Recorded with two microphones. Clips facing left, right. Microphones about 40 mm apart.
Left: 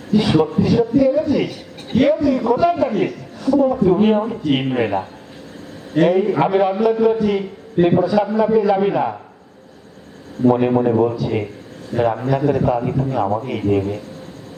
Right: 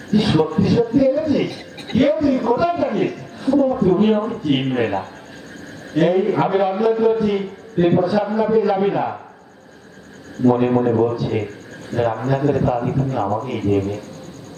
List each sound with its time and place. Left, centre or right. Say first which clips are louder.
0.1 s a man's voice: left 1 dB; centre
10.4 s a man's voice: left 1 dB; centre